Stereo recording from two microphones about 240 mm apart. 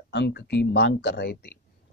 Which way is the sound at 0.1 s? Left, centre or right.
Left.